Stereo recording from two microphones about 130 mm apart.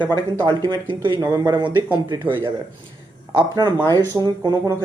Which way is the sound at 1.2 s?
25° right (ahead or behind).